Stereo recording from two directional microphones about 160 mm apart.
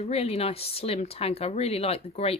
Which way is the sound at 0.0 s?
40° left (ahead or behind).